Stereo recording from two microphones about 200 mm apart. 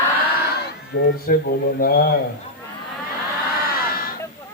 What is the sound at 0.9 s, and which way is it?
A man's voice, 50° left (ahead or behind).